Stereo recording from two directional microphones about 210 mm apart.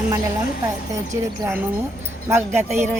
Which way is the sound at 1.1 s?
15° right (ahead or behind).